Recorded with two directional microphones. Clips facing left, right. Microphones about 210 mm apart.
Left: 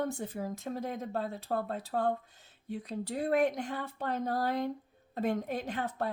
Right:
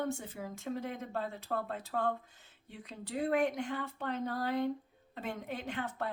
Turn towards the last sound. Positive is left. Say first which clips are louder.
# left 4 dB
turn(degrees=40)  # may be behind; listen again after turning